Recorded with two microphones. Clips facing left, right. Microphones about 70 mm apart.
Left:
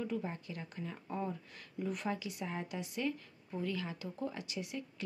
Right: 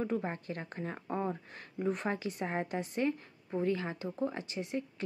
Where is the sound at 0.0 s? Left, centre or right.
Right.